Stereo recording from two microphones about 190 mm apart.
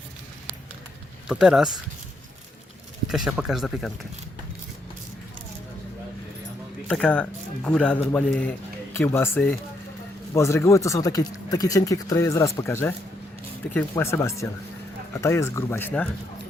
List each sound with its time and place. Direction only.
1.3 s speech: 5° right (ahead or behind)
3.1 s speech: centre (ahead or behind)
6.8 s speech: 5° left (ahead or behind)